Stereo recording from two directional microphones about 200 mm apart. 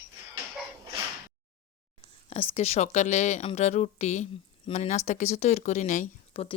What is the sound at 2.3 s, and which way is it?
Speech, 30° left (ahead or behind).